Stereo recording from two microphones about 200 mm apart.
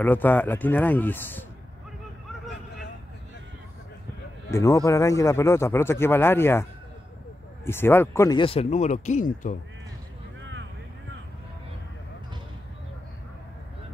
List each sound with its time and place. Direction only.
0.0 s a man's voice: 10° left (ahead or behind)
4.5 s a man's voice: 15° left (ahead or behind)
7.6 s a man's voice: 10° left (ahead or behind)
8.4 s speech: 30° left (ahead or behind)